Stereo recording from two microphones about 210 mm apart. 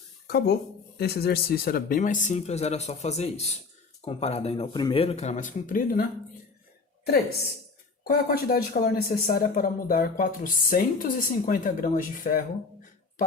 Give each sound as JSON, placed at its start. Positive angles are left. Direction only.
{"t": 0.3, "sound": "speech", "side_deg": 50}
{"t": 8.0, "sound": "speech", "side_deg": 45}